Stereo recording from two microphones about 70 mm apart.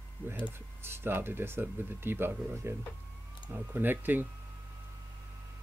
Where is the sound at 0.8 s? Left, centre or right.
Right.